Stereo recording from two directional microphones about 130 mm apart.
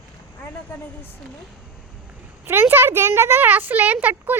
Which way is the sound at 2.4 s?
15° right (ahead or behind).